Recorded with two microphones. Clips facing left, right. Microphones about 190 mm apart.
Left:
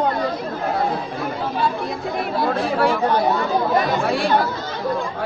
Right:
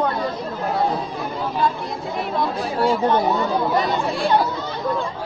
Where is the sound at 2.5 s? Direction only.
65° left (ahead or behind).